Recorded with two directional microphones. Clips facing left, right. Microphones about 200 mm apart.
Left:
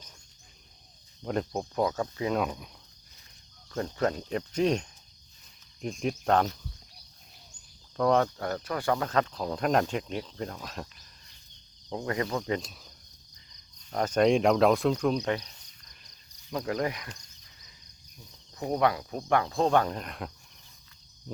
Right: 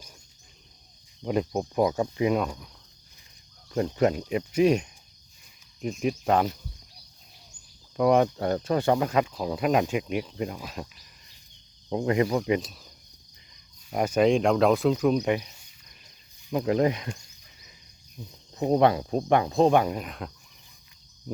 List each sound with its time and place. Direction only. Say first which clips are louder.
1.2 s speech: right 4 dB; 5° right (ahead or behind)
1.8 s speech: right 5 dB; 15° right (ahead or behind)
3.7 s speech: right 5 dB; 20° right (ahead or behind)
7.9 s cricket: right 4 dB; 15° right (ahead or behind)
9.0 s speech: right 3 dB; 10° right (ahead or behind)
11.9 s speech: right 7 dB; 20° right (ahead or behind); by 12.9 s centre (ahead or behind)
13.9 s speech: right 2 dB; 10° right (ahead or behind)
16.5 s cricket: right 7 dB; 20° right (ahead or behind)
18.3 s cricket: right 7 dB; 25° right (ahead or behind); by 20.3 s centre (ahead or behind)